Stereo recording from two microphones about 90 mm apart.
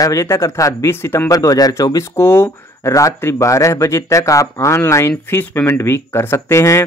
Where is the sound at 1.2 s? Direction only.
45° left (ahead or behind).